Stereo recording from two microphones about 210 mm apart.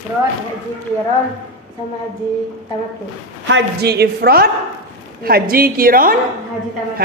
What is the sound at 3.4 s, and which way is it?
A man's voice, 55° right (ahead or behind).